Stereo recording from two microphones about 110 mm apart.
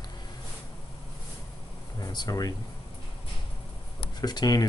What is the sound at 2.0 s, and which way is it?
Speech, 35° left (ahead or behind).